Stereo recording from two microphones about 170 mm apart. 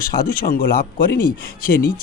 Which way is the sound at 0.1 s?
60° left (ahead or behind).